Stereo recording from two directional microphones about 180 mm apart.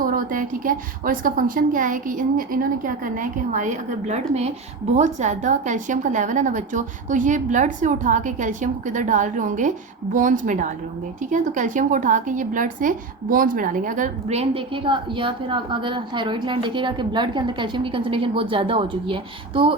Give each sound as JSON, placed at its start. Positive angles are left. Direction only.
{"t": 0.0, "sound": "a woman's voice", "side_deg": -50}